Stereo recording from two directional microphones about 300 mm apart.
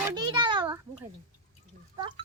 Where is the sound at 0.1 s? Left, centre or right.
Centre.